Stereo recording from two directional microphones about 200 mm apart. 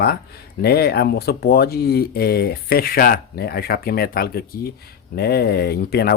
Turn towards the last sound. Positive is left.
turn(degrees=55)  # may be behind; listen again after turning